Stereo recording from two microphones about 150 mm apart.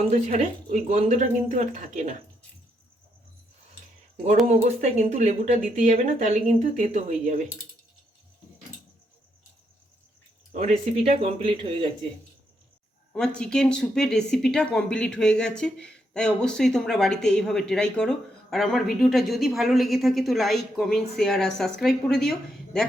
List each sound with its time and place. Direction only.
0.1 s speech: 50° right (ahead or behind)
4.4 s speech: 50° right (ahead or behind)
10.5 s speech: 50° right (ahead or behind)
11.2 s speech: 40° right (ahead or behind)
13.1 s speech: 5° left (ahead or behind)